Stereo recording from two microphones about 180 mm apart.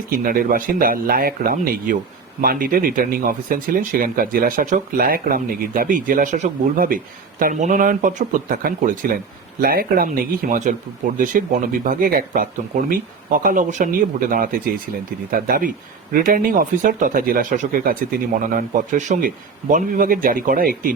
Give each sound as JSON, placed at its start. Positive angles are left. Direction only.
{"t": 0.1, "sound": "speech", "side_deg": -50}